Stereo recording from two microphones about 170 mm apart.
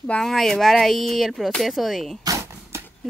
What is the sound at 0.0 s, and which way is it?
Speech, 5° left (ahead or behind).